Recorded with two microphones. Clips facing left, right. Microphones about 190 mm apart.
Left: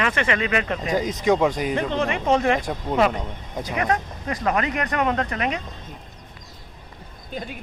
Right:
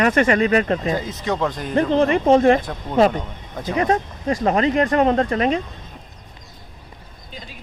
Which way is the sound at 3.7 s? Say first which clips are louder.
Right 5 dB; 25° right (ahead or behind).